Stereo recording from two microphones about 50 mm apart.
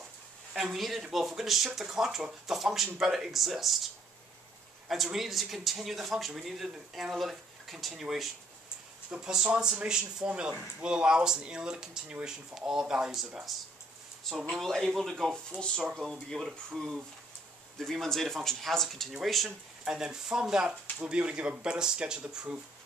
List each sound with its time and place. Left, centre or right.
0.5 s speech: centre
4.8 s speech: centre
14.3 s speech: centre
19.8 s speech: centre